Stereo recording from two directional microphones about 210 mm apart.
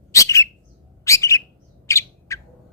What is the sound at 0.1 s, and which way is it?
Bird, 15° left (ahead or behind).